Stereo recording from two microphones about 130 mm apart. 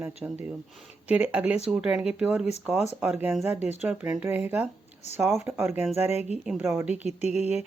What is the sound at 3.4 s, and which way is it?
Speech, 20° right (ahead or behind).